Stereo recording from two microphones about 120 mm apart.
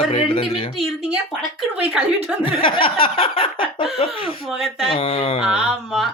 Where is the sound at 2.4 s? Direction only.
45° left (ahead or behind).